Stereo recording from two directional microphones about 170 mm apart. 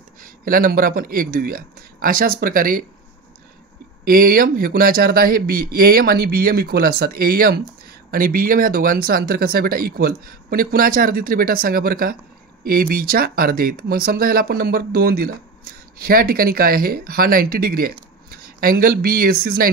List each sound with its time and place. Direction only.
0.2 s speech: 55° right (ahead or behind)
4.0 s speech: 60° right (ahead or behind)